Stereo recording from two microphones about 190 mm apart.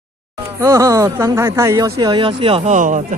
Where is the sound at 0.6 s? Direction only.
15° right (ahead or behind).